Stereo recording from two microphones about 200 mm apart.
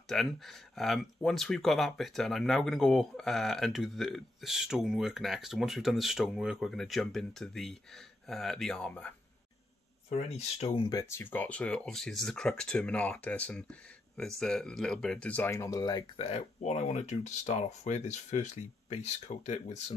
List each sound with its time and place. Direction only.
0.1 s speech: centre (ahead or behind)
10.0 s speech: 35° left (ahead or behind)
10.9 s speech: 15° left (ahead or behind)
16.3 s speech: 30° left (ahead or behind)